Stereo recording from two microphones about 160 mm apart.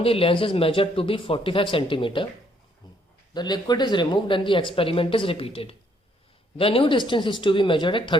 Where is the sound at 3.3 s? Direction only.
25° left (ahead or behind).